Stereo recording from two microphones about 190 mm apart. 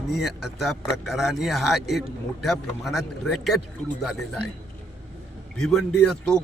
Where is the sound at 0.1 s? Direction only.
Centre (ahead or behind).